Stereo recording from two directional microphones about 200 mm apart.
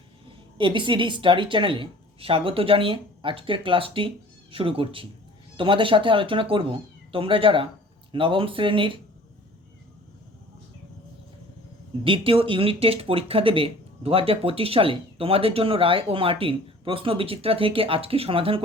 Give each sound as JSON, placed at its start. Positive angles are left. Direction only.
{"t": 0.6, "sound": "speech", "side_deg": -25}
{"t": 12.0, "sound": "speech", "side_deg": -25}